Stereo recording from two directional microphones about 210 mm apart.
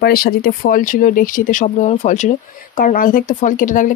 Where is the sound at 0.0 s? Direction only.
45° left (ahead or behind).